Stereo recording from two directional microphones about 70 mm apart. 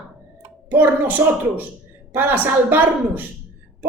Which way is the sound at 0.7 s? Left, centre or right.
Right.